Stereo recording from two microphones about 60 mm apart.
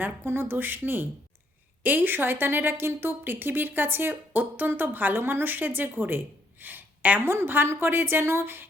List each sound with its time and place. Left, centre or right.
0.0 s a woman's voice: right
7.3 s a woman's voice: right